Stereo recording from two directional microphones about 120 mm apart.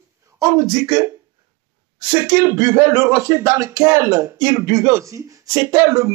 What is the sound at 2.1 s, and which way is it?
Speech, 30° right (ahead or behind).